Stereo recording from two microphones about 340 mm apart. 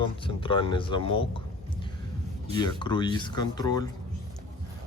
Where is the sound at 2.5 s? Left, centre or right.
Centre.